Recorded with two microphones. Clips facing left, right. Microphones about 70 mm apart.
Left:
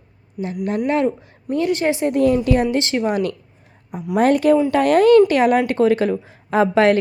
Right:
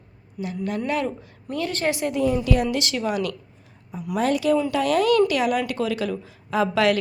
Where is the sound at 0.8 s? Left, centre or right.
Left.